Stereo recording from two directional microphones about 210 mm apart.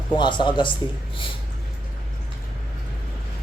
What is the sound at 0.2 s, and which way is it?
Speech, 20° left (ahead or behind).